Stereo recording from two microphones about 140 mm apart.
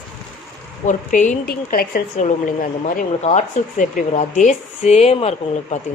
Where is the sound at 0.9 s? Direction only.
65° left (ahead or behind); by 2.2 s 90° left.